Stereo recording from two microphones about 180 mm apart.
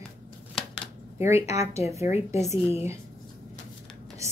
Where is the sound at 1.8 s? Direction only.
15° right (ahead or behind).